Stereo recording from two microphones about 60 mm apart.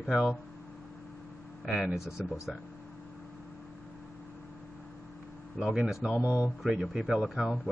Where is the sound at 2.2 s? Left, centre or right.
Centre.